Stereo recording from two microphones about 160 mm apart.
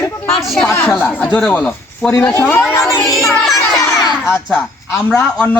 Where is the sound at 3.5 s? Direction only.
20° left (ahead or behind).